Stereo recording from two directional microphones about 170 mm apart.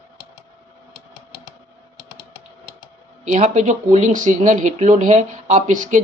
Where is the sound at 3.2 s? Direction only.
45° right (ahead or behind).